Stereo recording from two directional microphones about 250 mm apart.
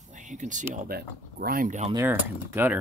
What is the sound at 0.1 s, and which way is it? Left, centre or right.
Speech, right.